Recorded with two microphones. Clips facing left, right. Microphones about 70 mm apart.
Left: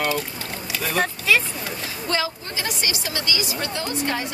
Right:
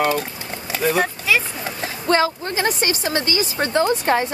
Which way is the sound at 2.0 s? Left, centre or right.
Right.